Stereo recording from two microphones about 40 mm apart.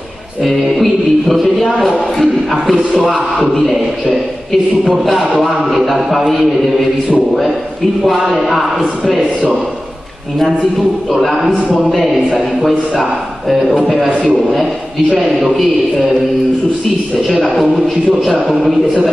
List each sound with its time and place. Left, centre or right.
0.4 s speech: centre
5.9 s speech: centre
8.0 s speech: centre
17.3 s speech: centre